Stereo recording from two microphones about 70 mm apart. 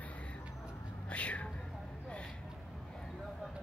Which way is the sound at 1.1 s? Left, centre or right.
Centre.